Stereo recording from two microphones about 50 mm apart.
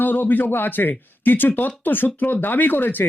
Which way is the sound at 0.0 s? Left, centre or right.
Left.